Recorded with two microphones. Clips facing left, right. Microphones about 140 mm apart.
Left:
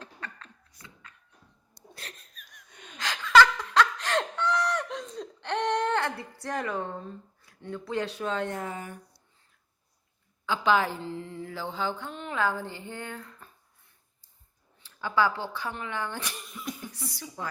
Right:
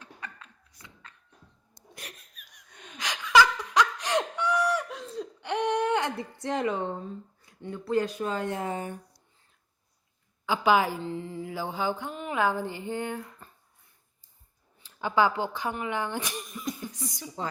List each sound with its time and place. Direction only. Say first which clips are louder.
0.2 s a sound: right 1 dB; 10° right (ahead or behind)
2.0 s laughter: right 1 dB; 10° right (ahead or behind)
7.6 s speech: right 4 dB; 10° right (ahead or behind)
8.5 s speech: right 3 dB; 30° right (ahead or behind)
10.4 s speech: right 2 dB; 10° right (ahead or behind)
11.4 s a sound: right 2 dB; 15° right (ahead or behind)
12.4 s speech: right 2 dB; 15° right (ahead or behind)
14.8 s speech: right 2 dB; 15° right (ahead or behind)